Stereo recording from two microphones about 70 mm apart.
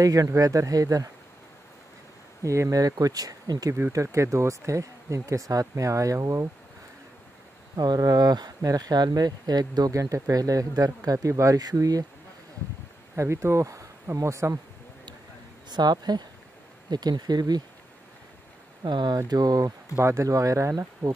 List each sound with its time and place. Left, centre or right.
0.0 s speech: right
2.4 s speech: right
2.8 s speech: right
3.9 s speech: right
7.7 s speech: right
9.9 s speech: right
13.1 s speech: right
15.7 s speech: right
18.9 s speech: right
19.2 s speech: right
20.0 s speech: right